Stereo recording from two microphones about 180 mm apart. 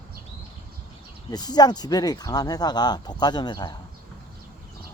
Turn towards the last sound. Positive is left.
turn(degrees=25)  # may be behind; listen again after turning